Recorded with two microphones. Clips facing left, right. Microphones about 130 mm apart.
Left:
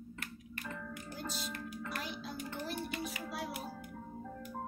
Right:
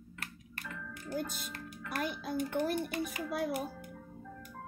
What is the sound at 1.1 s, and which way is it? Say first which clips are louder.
A child's voice: right 6 dB; 50° right (ahead or behind).